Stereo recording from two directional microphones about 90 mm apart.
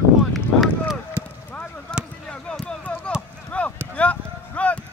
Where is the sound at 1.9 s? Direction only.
10° left (ahead or behind).